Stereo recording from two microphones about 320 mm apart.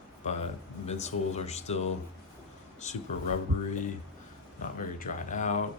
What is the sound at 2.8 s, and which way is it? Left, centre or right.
Speech, left.